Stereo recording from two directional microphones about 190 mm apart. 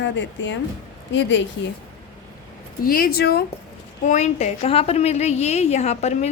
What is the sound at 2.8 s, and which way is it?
Speech, 50° left (ahead or behind).